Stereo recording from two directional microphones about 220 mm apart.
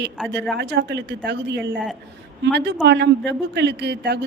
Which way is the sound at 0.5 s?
55° right (ahead or behind).